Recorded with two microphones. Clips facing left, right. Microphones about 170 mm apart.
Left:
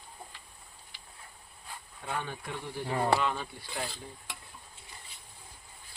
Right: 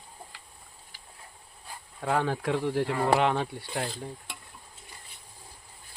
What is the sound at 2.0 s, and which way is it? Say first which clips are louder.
Speech: right 10 dB; 90° right.